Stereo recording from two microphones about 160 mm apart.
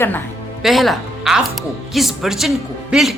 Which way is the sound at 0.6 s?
Centre (ahead or behind).